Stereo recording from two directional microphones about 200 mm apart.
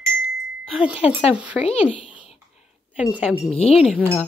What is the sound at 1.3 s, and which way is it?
Speech, 5° right (ahead or behind).